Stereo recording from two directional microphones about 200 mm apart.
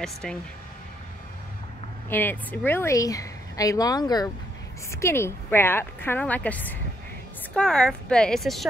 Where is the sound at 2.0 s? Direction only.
10° left (ahead or behind).